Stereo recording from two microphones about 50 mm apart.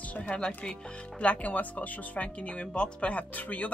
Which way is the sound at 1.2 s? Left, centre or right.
Left.